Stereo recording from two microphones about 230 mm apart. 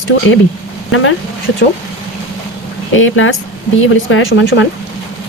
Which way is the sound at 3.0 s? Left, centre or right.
Left.